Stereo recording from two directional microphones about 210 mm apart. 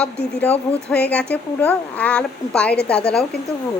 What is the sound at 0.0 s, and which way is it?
A woman's voice, 5° left (ahead or behind).